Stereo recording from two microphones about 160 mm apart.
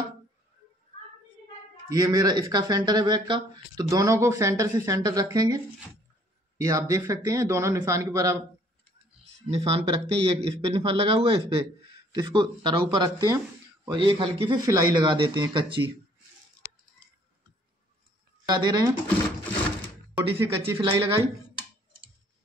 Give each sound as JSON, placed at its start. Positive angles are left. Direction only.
{"t": 1.9, "sound": "a man's voice", "side_deg": -25}
{"t": 6.6, "sound": "a man's voice", "side_deg": -20}
{"t": 9.5, "sound": "a man's voice", "side_deg": -35}
{"t": 18.5, "sound": "a man's voice", "side_deg": -25}
{"t": 20.2, "sound": "a man's voice", "side_deg": -35}